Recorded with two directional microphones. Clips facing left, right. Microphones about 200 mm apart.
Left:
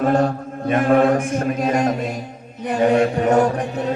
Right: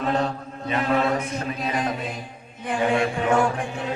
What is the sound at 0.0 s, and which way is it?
A man's voice, 50° left (ahead or behind).